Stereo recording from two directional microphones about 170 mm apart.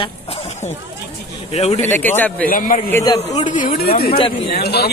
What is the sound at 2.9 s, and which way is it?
Speech, 20° left (ahead or behind).